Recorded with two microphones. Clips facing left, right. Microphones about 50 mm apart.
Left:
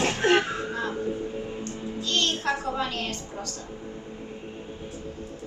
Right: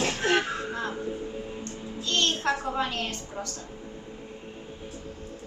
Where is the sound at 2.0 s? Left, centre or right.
Right.